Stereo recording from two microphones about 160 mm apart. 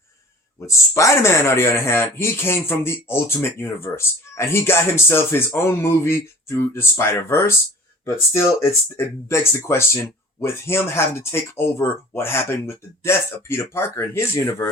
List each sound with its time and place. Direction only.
0.7 s speech: 20° left (ahead or behind)